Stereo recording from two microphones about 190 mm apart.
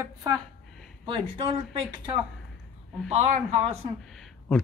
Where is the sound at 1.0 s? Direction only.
25° right (ahead or behind).